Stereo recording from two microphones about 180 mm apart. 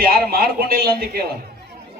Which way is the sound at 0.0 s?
55° right (ahead or behind).